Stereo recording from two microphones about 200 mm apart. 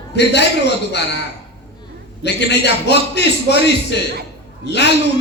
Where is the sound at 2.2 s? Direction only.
60° left (ahead or behind).